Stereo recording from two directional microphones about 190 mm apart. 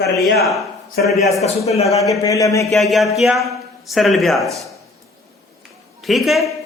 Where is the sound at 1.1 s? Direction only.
Centre (ahead or behind).